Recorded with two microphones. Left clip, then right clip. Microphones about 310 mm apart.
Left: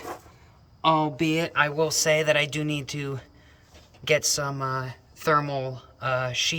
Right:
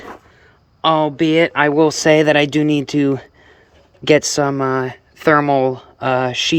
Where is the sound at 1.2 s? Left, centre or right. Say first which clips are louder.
Right 10 dB; centre.